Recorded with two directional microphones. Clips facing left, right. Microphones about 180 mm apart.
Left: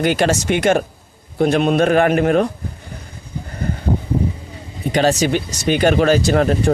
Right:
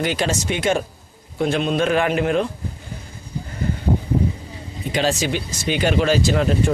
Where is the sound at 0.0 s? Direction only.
60° left (ahead or behind).